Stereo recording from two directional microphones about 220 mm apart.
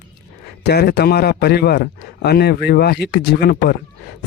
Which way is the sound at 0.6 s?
45° left (ahead or behind).